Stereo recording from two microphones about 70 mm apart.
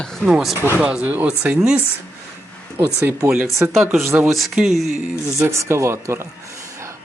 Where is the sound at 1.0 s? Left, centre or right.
Right.